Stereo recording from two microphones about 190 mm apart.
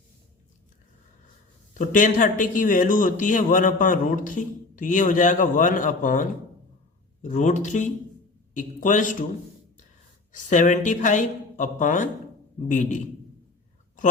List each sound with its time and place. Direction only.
1.8 s speech: 45° left (ahead or behind)
10.5 s speech: 40° left (ahead or behind)